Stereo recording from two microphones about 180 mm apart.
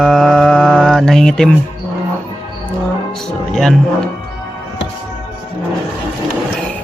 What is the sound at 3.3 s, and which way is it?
Mantra, centre (ahead or behind).